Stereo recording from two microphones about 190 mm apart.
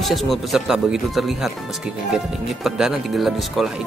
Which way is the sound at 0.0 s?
Centre (ahead or behind).